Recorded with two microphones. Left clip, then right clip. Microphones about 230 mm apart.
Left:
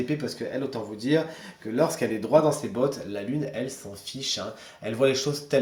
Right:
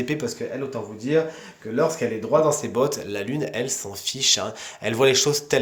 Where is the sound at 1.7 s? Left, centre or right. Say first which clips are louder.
Right 2 dB; right.